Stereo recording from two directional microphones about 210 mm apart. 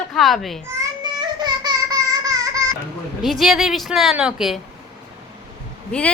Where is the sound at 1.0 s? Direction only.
20° right (ahead or behind).